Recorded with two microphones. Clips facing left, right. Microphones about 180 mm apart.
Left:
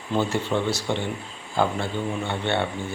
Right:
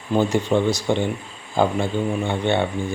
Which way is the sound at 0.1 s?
15° right (ahead or behind).